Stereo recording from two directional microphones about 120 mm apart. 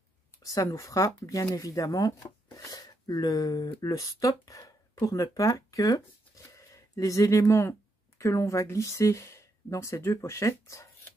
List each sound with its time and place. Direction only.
0.4 s speech: 30° left (ahead or behind)